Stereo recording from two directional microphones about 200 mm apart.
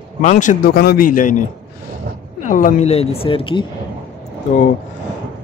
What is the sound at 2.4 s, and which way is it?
Speech, 40° left (ahead or behind).